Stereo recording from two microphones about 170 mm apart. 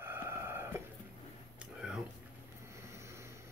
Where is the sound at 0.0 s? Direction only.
15° right (ahead or behind).